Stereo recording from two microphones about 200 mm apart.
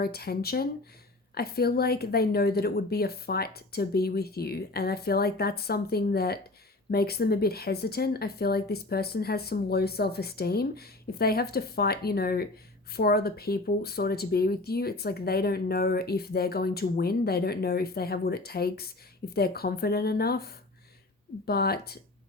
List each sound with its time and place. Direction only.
0.0 s speech: 50° left (ahead or behind)